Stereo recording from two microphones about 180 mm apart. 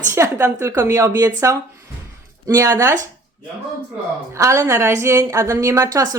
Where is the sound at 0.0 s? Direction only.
15° right (ahead or behind).